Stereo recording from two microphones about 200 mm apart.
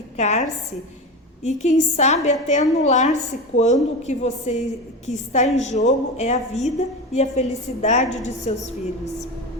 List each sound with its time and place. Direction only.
0.2 s a woman's voice: 35° left (ahead or behind)
1.5 s a woman's voice: 35° left (ahead or behind)